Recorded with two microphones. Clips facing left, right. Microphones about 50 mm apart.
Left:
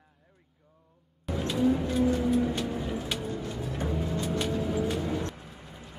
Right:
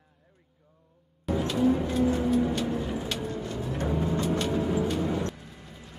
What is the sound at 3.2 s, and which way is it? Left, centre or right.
Vehicle, centre.